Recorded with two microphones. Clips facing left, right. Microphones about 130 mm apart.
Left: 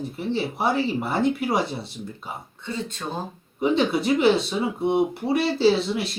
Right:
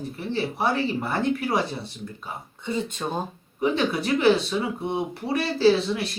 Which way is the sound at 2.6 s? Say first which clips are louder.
Right 3 dB; 15° right (ahead or behind).